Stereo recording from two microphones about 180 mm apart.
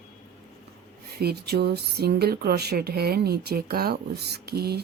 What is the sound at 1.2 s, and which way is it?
Speech, 60° right (ahead or behind).